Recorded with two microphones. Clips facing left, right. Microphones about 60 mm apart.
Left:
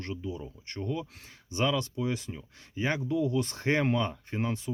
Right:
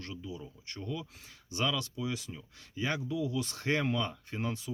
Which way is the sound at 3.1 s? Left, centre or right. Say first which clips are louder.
Left 5 dB; left.